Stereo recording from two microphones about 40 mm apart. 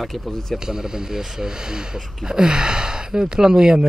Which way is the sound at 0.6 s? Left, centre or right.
Centre.